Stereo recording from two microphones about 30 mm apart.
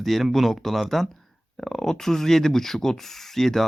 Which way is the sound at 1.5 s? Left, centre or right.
Centre.